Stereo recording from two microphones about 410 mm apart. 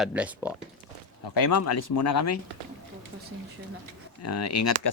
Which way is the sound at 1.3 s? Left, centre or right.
Left.